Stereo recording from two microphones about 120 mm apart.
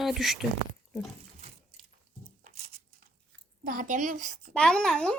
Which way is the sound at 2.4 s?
65° right (ahead or behind).